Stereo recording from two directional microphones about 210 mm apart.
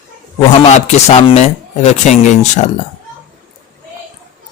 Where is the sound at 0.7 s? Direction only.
30° left (ahead or behind).